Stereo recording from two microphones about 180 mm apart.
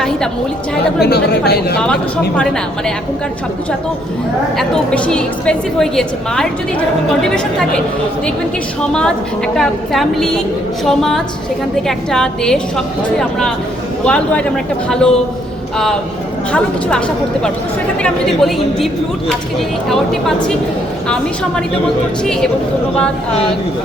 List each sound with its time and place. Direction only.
1.0 s speech: 65° left (ahead or behind)
2.4 s a woman's voice: 5° left (ahead or behind)
4.5 s a woman's voice: 5° left (ahead or behind)
8.9 s a woman's voice: 5° left (ahead or behind)
16.5 s a woman's voice: 5° left (ahead or behind)
18.0 s a woman's voice: centre (ahead or behind)
22.2 s a woman's voice: 5° left (ahead or behind)